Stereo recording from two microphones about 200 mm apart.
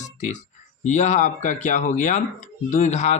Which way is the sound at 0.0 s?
35° left (ahead or behind).